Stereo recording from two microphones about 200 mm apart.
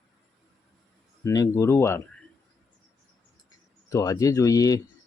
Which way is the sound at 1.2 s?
15° left (ahead or behind).